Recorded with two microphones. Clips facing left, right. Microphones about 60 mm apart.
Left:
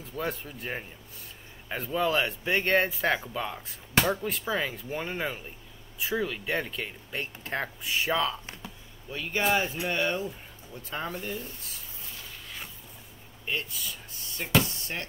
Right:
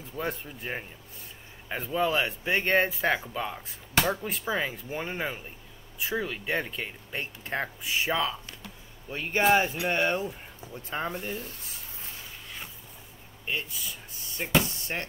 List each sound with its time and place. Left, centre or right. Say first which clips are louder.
0.2 s speech: even; centre
9.1 s speech: right 4 dB; right
13.5 s speech: even; centre